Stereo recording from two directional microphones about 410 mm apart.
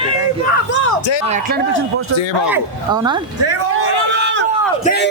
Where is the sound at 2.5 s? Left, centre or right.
Centre.